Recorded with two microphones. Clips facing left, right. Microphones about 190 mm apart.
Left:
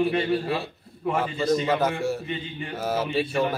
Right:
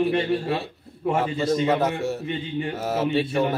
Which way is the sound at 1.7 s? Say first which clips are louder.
Right 1 dB; centre (ahead or behind).